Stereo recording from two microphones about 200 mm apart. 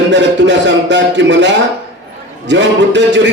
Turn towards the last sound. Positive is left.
turn(degrees=-65)  # may be behind; listen again after turning